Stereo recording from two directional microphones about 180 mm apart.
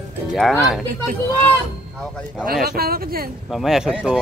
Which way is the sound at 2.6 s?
55° right (ahead or behind).